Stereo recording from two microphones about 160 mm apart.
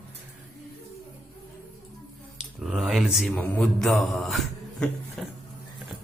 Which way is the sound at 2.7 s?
Centre (ahead or behind).